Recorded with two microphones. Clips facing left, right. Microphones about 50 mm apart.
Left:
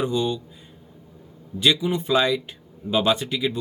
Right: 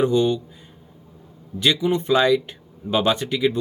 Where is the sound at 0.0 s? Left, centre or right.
Right.